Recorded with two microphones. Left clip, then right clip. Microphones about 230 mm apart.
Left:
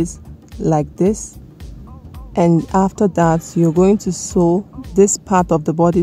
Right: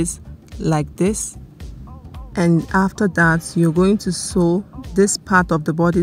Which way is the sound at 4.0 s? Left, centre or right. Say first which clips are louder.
Left 1 dB; centre.